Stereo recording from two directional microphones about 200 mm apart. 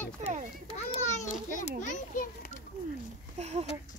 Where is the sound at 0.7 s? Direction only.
35° left (ahead or behind).